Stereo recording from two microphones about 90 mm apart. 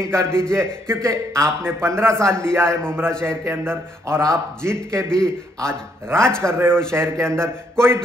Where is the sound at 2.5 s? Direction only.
30° right (ahead or behind).